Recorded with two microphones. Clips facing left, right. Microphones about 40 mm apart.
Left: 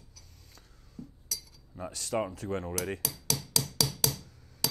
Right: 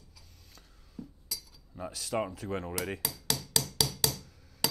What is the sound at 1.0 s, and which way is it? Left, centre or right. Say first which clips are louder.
Chink: right 1 dB; centre.